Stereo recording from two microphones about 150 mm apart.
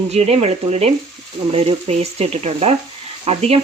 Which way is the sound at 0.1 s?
45° right (ahead or behind).